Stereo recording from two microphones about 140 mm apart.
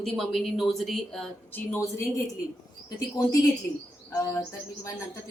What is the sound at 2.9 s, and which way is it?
Bird, 25° left (ahead or behind).